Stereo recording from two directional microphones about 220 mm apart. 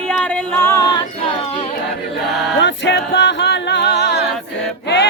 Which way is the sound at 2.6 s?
55° left (ahead or behind).